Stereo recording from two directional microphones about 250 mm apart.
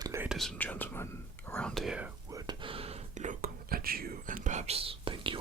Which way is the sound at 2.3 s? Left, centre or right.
Centre.